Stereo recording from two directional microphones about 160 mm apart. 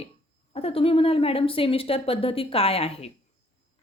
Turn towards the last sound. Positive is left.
turn(degrees=40)  # may be behind; listen again after turning